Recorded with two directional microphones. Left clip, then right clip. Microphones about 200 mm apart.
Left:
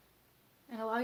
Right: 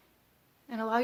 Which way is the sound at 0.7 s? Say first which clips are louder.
Right 6 dB; 40° right (ahead or behind).